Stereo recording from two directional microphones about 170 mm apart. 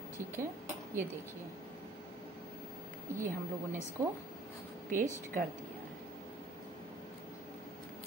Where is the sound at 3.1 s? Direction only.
15° right (ahead or behind).